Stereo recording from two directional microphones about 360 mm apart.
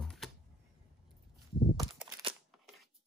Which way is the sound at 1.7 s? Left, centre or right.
Centre.